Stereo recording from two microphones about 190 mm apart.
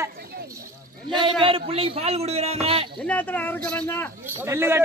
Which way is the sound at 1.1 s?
25° right (ahead or behind).